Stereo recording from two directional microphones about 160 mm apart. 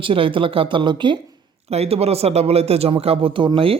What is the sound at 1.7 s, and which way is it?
Speech, 40° right (ahead or behind).